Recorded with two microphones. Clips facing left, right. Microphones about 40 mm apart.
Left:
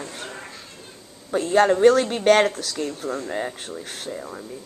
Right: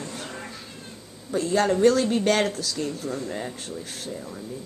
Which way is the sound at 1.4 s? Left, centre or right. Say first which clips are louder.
Left 4 dB; left.